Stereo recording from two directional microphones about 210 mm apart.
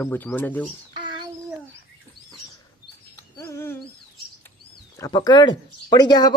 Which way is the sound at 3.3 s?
10° left (ahead or behind).